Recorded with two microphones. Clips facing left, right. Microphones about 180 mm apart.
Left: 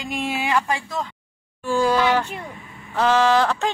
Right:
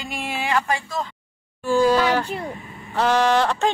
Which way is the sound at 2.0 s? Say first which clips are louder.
Even; 35° right (ahead or behind).